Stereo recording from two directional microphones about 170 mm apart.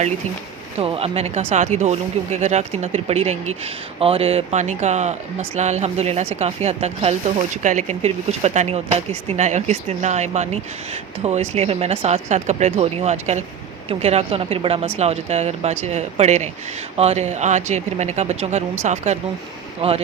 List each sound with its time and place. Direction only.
0.8 s speech: 35° right (ahead or behind)